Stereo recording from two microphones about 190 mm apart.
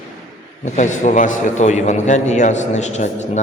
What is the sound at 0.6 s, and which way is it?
A man's voice, 40° left (ahead or behind).